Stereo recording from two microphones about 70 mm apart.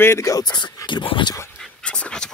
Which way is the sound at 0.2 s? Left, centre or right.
Left.